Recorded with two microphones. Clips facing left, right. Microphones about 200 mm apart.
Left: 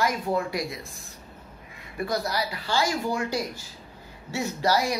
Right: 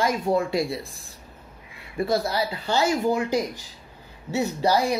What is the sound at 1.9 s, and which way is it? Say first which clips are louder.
Speech: right 4 dB; 25° right (ahead or behind).